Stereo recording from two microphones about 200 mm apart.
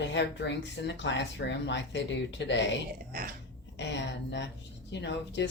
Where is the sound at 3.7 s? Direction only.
60° left (ahead or behind).